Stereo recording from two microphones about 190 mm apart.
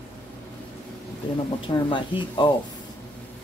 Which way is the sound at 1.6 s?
25° left (ahead or behind).